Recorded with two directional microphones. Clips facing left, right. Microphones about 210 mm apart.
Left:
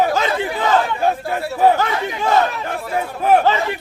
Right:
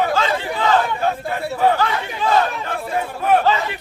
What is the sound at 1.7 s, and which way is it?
Speech, 20° left (ahead or behind).